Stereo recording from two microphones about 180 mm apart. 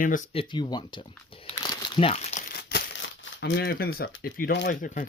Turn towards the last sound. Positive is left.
turn(degrees=45)  # may be behind; listen again after turning